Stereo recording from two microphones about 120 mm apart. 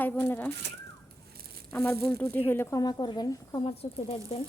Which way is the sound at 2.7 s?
30° left (ahead or behind).